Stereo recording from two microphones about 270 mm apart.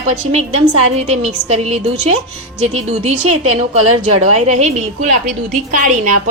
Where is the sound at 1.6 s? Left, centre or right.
Right.